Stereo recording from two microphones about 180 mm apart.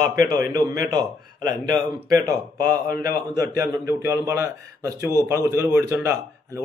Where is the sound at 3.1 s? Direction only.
15° right (ahead or behind).